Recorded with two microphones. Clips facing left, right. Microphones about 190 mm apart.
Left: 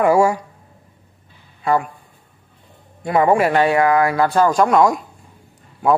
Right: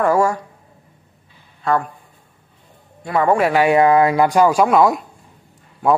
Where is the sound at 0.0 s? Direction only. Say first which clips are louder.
Left 2 dB; 10° left (ahead or behind).